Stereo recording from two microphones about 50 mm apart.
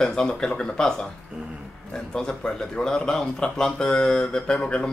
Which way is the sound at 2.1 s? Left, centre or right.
Centre.